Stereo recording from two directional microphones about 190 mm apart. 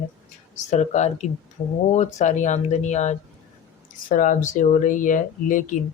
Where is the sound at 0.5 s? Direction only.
40° left (ahead or behind).